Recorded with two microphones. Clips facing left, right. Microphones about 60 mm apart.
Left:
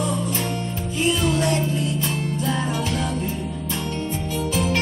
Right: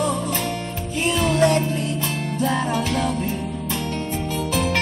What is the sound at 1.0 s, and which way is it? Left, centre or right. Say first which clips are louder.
Music: right 3 dB; right.